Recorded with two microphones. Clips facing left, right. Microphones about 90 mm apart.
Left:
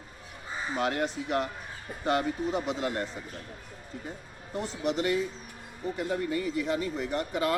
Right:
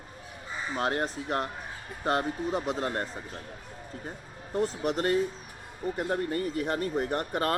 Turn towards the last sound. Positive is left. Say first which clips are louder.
# even
turn(degrees=-50)  # may be behind; listen again after turning